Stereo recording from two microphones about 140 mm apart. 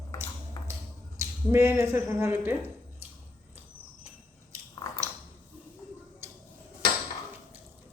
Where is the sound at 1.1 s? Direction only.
20° right (ahead or behind).